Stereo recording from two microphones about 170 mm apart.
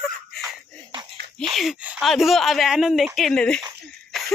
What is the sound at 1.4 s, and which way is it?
Speech, centre (ahead or behind).